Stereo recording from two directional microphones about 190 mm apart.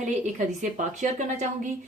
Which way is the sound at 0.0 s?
40° right (ahead or behind).